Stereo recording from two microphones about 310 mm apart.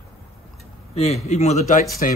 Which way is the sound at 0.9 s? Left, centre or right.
Centre.